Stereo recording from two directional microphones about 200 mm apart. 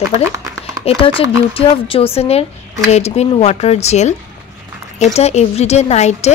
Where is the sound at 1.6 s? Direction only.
25° left (ahead or behind).